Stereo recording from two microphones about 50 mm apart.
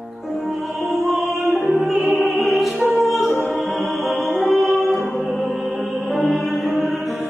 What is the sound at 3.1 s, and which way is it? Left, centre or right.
Choir, centre.